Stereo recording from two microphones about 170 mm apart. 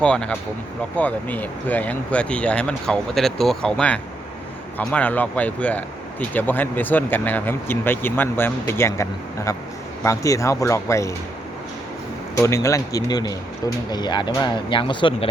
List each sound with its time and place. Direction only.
0.0 s speech: 5° left (ahead or behind)
12.4 s speech: 15° left (ahead or behind)